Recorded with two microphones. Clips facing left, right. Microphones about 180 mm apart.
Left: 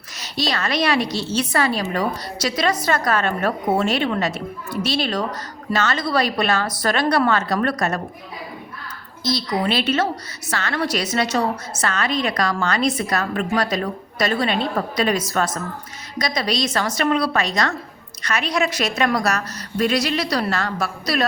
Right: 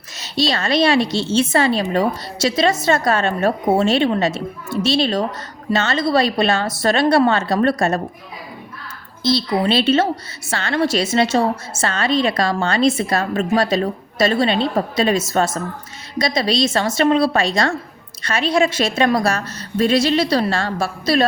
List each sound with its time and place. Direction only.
0.2 s a woman's voice: 25° right (ahead or behind)
9.2 s a woman's voice: 25° right (ahead or behind)